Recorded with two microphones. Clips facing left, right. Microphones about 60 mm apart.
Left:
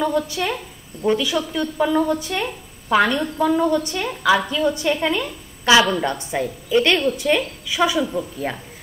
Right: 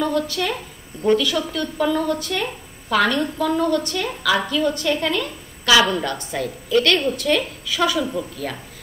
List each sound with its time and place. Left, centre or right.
0.0 s a woman's voice: centre
8.0 s a woman's voice: centre